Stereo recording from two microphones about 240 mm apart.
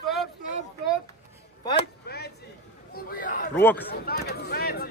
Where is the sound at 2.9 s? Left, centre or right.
Left.